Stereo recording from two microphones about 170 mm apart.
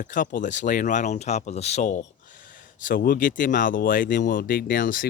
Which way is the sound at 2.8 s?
60° left (ahead or behind).